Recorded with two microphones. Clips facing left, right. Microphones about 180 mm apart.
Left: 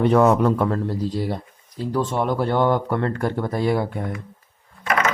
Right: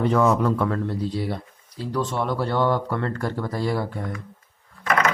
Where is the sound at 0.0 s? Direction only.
60° left (ahead or behind).